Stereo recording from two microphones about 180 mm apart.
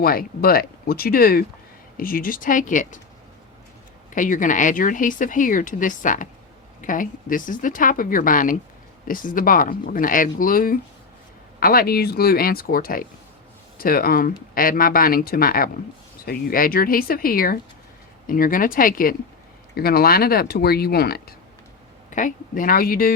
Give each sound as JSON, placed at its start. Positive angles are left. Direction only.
{"t": 0.0, "sound": "speech", "side_deg": 55}
{"t": 4.1, "sound": "speech", "side_deg": 45}
{"t": 22.1, "sound": "speech", "side_deg": 45}